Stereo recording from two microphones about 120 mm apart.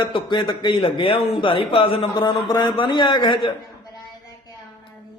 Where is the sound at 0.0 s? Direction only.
40° left (ahead or behind).